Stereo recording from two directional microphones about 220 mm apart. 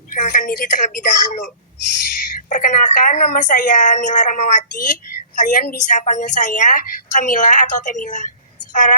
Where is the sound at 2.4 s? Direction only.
35° left (ahead or behind).